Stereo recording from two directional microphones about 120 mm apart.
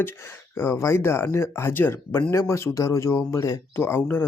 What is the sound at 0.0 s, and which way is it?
Speech, 20° left (ahead or behind).